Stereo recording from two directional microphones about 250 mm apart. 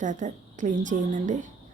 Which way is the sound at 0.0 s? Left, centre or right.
Right.